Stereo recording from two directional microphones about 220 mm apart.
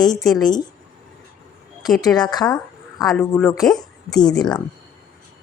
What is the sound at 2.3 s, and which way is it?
Speech, 20° left (ahead or behind).